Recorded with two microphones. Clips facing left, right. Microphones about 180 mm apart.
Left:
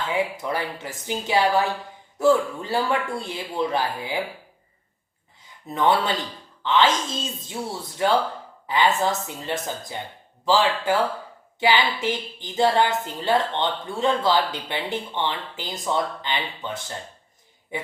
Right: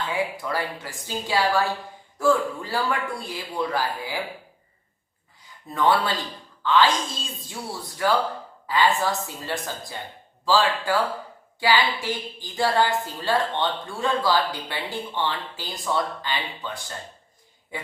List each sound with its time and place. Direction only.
0.0 s a woman's voice: 25° left (ahead or behind)
5.6 s a woman's voice: 20° left (ahead or behind)
17.7 s a sound: 20° left (ahead or behind)